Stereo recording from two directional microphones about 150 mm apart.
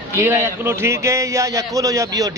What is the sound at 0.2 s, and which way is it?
A man's voice, 15° right (ahead or behind).